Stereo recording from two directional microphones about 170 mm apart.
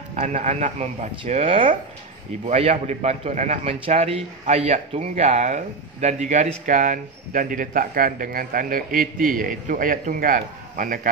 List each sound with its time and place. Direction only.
0.1 s a man's voice: 45° right (ahead or behind)